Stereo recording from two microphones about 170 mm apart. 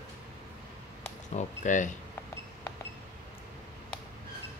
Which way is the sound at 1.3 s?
45° left (ahead or behind).